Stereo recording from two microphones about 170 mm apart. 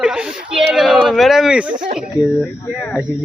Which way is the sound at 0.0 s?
5° right (ahead or behind).